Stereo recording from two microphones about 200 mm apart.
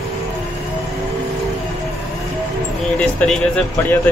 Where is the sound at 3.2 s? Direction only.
5° left (ahead or behind).